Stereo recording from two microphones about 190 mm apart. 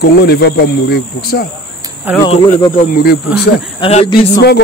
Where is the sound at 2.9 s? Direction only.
55° left (ahead or behind).